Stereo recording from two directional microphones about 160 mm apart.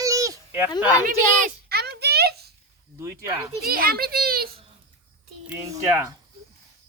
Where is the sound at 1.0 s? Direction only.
70° right (ahead or behind); by 2.5 s 90° right.